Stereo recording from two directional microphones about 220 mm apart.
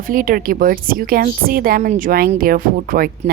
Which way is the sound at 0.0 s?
40° right (ahead or behind).